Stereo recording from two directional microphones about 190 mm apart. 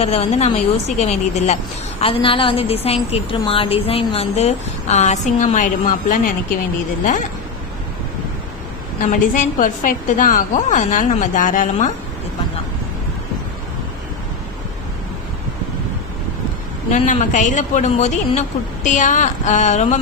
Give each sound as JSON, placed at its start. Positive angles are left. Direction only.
{"t": 0.0, "sound": "a woman's voice", "side_deg": 35}
{"t": 9.0, "sound": "a woman's voice", "side_deg": 45}
{"t": 16.9, "sound": "a woman's voice", "side_deg": 40}